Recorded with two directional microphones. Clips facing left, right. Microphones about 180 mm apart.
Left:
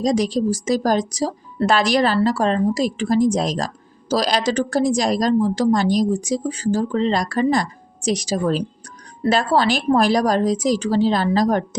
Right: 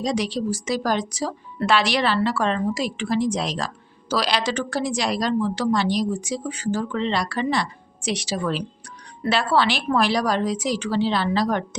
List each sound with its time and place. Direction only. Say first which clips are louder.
0.0 s a woman's voice: left 5 dB; 40° left (ahead or behind)